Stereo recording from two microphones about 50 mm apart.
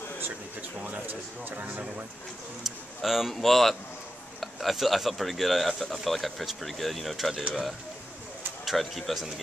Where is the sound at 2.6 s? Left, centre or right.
Centre.